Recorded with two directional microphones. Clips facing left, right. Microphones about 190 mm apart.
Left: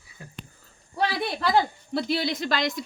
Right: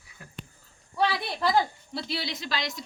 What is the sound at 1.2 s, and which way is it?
A woman's voice, 60° left (ahead or behind).